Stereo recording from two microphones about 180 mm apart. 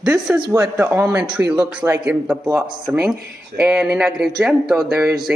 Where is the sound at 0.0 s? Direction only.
5° right (ahead or behind).